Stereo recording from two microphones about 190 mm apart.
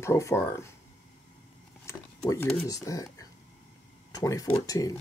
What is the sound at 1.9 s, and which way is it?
Speech, 15° left (ahead or behind).